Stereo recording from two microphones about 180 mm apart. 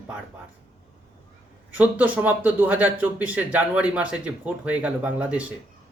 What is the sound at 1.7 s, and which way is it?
A man's voice, 10° right (ahead or behind).